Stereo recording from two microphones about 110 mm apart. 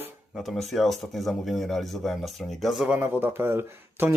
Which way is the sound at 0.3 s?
Centre (ahead or behind).